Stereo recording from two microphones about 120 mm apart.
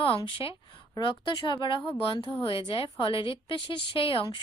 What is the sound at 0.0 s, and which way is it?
A woman's voice, 45° left (ahead or behind).